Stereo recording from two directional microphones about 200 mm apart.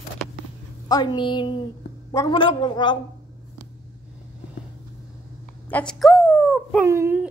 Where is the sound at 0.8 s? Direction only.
20° left (ahead or behind).